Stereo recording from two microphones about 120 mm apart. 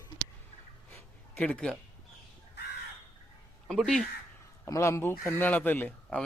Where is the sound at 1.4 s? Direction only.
10° left (ahead or behind).